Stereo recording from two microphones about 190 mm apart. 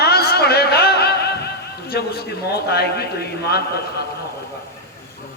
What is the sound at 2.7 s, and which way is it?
A man's voice, 55° left (ahead or behind).